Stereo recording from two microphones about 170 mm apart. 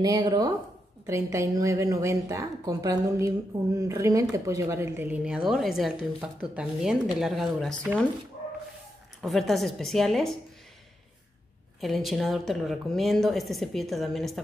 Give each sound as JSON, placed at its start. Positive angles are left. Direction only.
{"t": 0.0, "sound": "a woman's voice", "side_deg": -25}
{"t": 9.2, "sound": "a woman's voice", "side_deg": 0}
{"t": 11.8, "sound": "a woman's voice", "side_deg": 0}